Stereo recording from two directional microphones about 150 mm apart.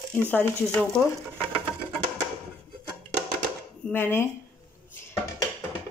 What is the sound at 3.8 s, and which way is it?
Speech, 15° left (ahead or behind).